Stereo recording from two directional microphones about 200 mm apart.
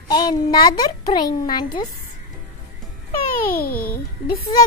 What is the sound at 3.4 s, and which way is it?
Speech, 45° left (ahead or behind).